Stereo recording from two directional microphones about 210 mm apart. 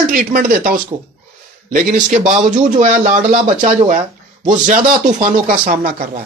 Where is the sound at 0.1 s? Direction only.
40° right (ahead or behind).